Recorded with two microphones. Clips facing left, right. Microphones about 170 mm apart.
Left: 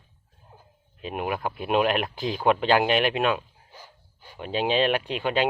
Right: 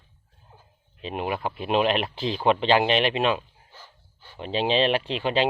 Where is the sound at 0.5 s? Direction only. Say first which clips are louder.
Left 2 dB; 10° left (ahead or behind).